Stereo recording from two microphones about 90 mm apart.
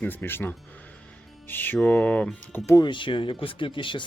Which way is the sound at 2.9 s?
65° left (ahead or behind).